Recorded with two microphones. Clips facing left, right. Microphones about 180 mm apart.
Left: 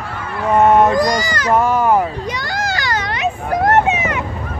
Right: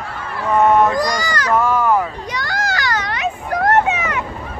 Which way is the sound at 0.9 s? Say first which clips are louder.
Left 3 dB; 20° left (ahead or behind).